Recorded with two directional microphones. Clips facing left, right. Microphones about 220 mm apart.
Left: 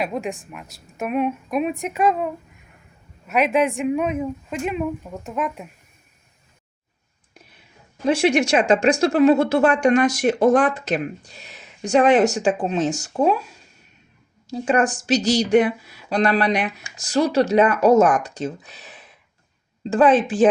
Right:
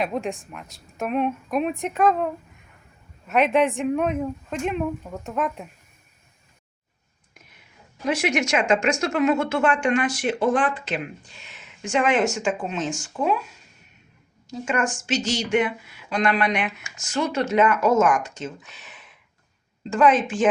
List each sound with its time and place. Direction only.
0.0 s speech: centre (ahead or behind)
7.3 s whispering: 30° left (ahead or behind)
8.0 s a woman's voice: 30° left (ahead or behind)
14.5 s a woman's voice: 35° left (ahead or behind)